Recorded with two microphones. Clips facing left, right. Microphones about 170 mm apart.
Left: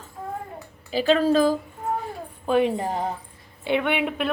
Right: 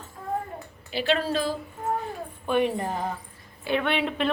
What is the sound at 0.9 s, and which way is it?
Speech, 40° left (ahead or behind).